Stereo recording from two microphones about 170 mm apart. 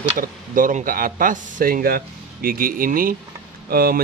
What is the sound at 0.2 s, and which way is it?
Speech, 50° right (ahead or behind).